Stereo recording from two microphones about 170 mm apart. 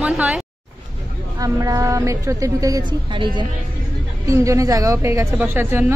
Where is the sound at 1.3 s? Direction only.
20° right (ahead or behind).